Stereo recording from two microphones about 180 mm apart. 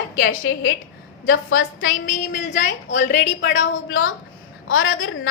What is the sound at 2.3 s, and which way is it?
Speech, 40° left (ahead or behind).